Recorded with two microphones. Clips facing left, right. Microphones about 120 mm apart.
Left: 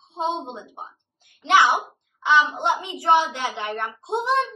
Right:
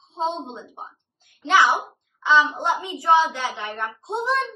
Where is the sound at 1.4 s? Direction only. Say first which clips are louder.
Left 1 dB; 20° left (ahead or behind).